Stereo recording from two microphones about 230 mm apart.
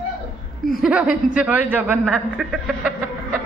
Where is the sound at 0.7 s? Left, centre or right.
Centre.